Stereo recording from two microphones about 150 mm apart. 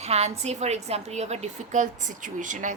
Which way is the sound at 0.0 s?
45° right (ahead or behind).